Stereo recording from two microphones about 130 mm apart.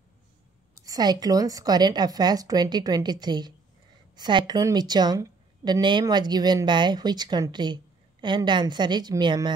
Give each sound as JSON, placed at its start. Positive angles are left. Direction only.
{"t": 0.8, "sound": "a woman's voice", "side_deg": -30}